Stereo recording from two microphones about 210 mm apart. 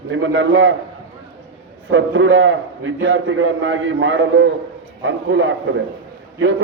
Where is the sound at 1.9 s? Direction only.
65° right (ahead or behind).